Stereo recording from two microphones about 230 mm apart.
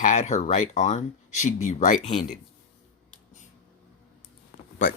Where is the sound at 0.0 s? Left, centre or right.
Left.